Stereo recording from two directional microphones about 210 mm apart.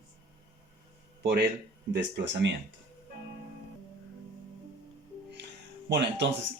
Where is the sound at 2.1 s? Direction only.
55° right (ahead or behind).